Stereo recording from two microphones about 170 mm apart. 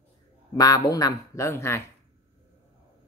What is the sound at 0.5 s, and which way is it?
Speech, 20° left (ahead or behind).